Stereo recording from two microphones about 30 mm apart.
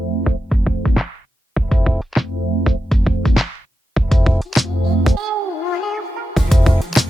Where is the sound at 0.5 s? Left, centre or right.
Centre.